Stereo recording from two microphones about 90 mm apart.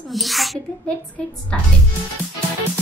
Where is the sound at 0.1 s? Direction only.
Centre (ahead or behind).